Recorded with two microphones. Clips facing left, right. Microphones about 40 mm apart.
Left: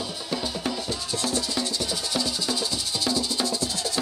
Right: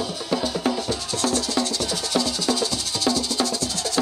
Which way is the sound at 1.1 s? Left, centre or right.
Left.